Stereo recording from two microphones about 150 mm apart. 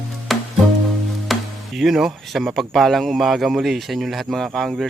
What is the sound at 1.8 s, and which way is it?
Speech, centre (ahead or behind).